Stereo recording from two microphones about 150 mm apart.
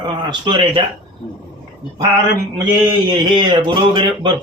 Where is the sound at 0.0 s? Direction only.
30° right (ahead or behind).